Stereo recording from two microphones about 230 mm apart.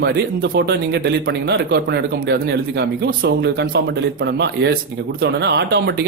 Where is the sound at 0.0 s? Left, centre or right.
Right.